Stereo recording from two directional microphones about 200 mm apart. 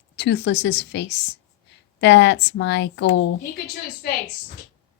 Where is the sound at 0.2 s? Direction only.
60° left (ahead or behind).